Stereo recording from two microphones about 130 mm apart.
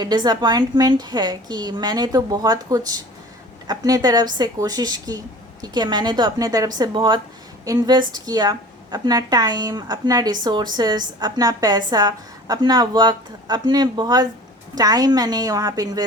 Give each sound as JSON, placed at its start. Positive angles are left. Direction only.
{"t": 0.0, "sound": "a woman's voice", "side_deg": -30}